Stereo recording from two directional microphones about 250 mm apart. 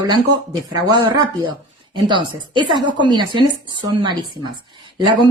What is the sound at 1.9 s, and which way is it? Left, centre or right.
A woman's voice, centre.